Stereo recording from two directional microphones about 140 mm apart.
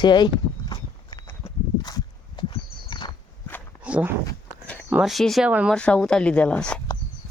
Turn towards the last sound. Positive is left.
turn(degrees=5)  # may be behind; listen again after turning